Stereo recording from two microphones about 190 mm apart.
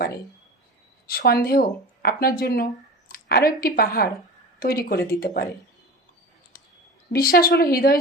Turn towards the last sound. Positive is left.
turn(degrees=50)  # may be behind; listen again after turning